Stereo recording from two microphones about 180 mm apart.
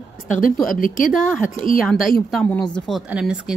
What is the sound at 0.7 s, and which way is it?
Speech, 50° left (ahead or behind).